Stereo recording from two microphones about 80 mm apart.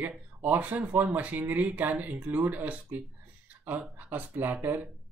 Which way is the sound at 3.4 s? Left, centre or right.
Right.